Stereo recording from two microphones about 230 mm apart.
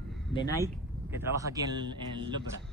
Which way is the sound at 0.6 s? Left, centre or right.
Centre.